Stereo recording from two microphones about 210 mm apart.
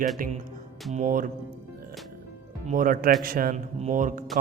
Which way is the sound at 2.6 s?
40° right (ahead or behind).